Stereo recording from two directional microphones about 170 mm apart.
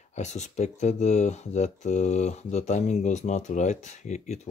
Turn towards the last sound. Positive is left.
turn(degrees=45)  # may be behind; listen again after turning